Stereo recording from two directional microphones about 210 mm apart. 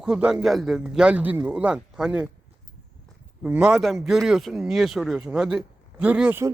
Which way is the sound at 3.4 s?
5° right (ahead or behind).